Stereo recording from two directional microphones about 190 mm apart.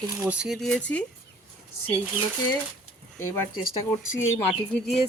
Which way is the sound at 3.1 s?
15° left (ahead or behind).